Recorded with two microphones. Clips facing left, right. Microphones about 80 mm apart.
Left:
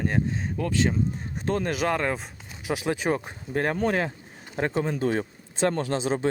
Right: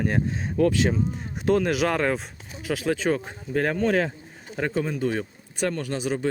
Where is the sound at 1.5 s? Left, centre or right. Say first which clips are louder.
Right 5 dB; centre.